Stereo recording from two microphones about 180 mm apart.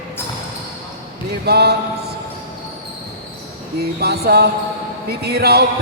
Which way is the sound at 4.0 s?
60° right (ahead or behind).